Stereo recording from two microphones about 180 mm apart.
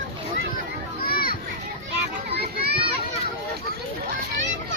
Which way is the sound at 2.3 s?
60° right (ahead or behind).